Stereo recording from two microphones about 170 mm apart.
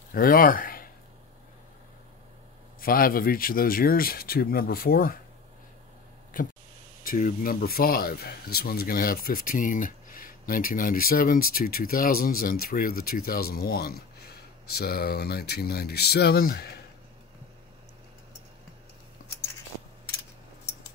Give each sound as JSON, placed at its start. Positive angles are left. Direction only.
{"t": 0.1, "sound": "speech", "side_deg": 60}
{"t": 2.8, "sound": "speech", "side_deg": 60}
{"t": 6.4, "sound": "speech", "side_deg": 55}